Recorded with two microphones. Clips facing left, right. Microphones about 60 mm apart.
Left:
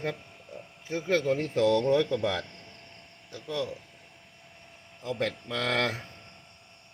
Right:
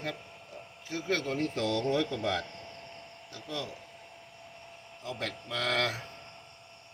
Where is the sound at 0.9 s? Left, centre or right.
Left; by 2.3 s centre.